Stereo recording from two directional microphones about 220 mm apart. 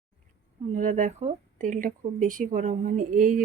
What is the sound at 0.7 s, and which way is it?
Speech, 35° right (ahead or behind).